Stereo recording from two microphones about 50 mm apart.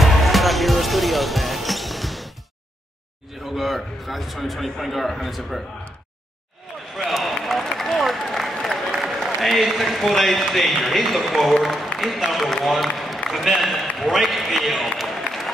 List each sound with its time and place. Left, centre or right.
0.0 s basketball bounce: centre
3.4 s a man's voice: centre
7.1 s a sound: centre
8.9 s applause: centre
9.4 s a man's voice: centre
12.6 s a sound: centre